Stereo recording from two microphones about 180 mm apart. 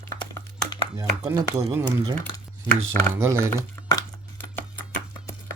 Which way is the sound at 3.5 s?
15° left (ahead or behind).